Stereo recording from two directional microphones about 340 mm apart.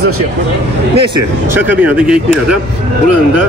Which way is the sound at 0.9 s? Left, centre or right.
Centre.